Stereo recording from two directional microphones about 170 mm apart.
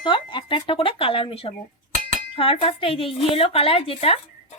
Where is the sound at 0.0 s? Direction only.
30° left (ahead or behind).